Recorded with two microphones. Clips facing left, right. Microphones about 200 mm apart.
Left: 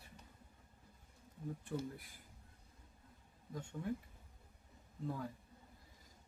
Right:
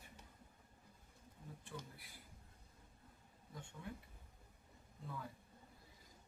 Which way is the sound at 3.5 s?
45° left (ahead or behind).